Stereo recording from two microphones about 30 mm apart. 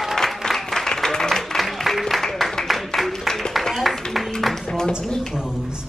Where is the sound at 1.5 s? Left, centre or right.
Centre.